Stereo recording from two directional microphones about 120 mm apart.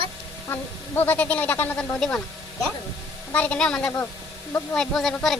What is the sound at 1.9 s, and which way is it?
Speech, 5° left (ahead or behind).